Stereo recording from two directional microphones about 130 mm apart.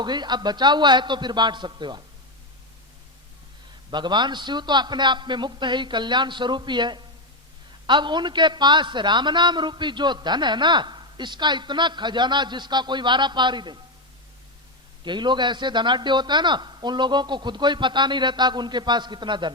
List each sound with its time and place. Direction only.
0.0 s a man's voice: 35° right (ahead or behind)
3.9 s a man's voice: 35° right (ahead or behind)
15.0 s a man's voice: 35° right (ahead or behind)